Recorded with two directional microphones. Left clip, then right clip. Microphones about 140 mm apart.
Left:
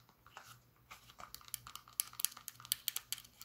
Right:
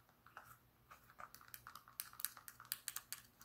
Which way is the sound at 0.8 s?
30° left (ahead or behind).